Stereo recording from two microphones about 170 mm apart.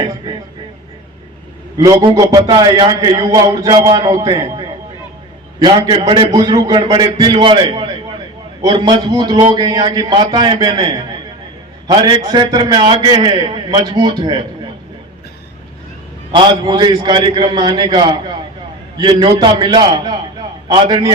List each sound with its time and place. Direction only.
0.0 s speech: 25° right (ahead or behind)
1.8 s a man's voice: 20° right (ahead or behind)
16.3 s a man's voice: 25° right (ahead or behind)